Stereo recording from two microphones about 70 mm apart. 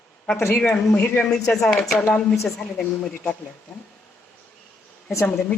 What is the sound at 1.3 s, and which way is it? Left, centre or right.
A woman's voice, centre.